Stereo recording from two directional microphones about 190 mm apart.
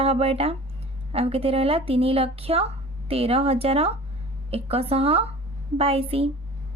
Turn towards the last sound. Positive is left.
turn(degrees=-30)  # may be behind; listen again after turning